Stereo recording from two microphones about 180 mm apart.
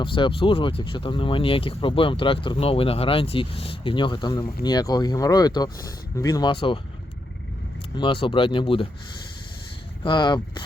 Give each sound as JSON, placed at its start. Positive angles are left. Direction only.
{"t": 0.0, "sound": "speech", "side_deg": 30}
{"t": 7.9, "sound": "speech", "side_deg": 30}
{"t": 10.0, "sound": "speech", "side_deg": 25}